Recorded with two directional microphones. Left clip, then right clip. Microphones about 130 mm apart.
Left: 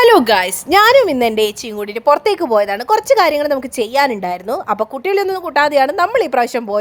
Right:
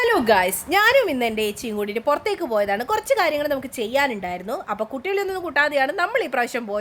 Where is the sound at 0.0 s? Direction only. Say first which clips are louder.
Left 8 dB; 75° left (ahead or behind).